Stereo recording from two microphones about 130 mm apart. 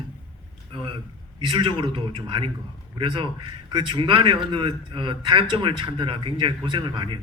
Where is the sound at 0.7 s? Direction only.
40° right (ahead or behind).